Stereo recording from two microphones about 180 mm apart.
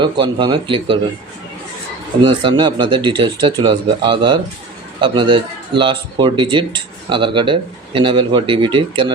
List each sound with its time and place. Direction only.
0.0 s speech: 25° right (ahead or behind)
2.2 s speech: 25° right (ahead or behind)